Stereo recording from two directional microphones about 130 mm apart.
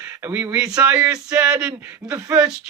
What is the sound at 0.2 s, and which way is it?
Speech, 15° right (ahead or behind).